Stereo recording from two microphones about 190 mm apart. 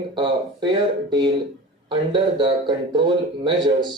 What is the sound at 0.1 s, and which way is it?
A man's voice, 25° right (ahead or behind).